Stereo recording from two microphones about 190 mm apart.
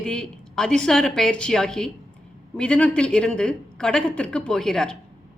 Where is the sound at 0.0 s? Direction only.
5° left (ahead or behind).